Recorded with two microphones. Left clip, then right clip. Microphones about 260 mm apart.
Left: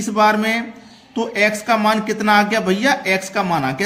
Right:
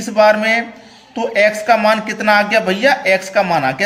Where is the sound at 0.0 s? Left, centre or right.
Centre.